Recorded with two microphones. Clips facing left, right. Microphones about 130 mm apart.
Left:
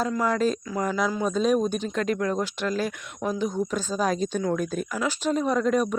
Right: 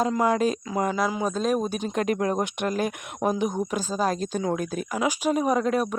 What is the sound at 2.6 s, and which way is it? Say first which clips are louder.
Speech: right 1 dB; 50° right (ahead or behind).